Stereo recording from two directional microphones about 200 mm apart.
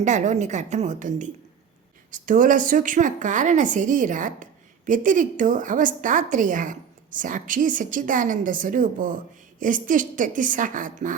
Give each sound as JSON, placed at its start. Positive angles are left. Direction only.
{"t": 0.0, "sound": "a woman's voice", "side_deg": -40}